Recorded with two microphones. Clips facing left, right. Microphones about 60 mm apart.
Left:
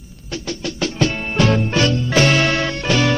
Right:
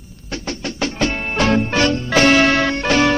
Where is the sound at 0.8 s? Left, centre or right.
Right.